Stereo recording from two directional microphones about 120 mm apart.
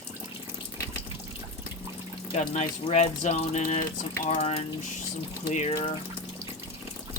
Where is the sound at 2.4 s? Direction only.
65° left (ahead or behind).